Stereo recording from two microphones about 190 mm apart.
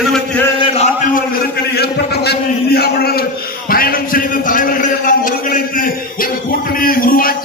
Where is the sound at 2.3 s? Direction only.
55° left (ahead or behind).